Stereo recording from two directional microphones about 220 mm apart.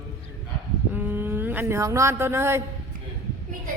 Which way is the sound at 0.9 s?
10° right (ahead or behind).